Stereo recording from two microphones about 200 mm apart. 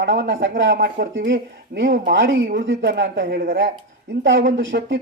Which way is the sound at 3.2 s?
50° right (ahead or behind).